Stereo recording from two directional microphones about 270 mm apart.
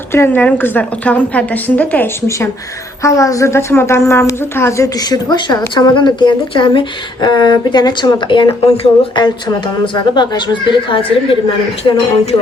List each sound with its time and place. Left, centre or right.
0.1 s a woman's voice: centre